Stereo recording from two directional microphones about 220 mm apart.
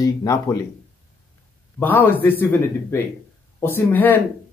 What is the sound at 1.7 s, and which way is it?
Speech, 10° left (ahead or behind).